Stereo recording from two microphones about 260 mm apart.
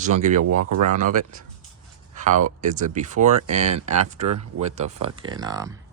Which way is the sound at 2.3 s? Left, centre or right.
Right.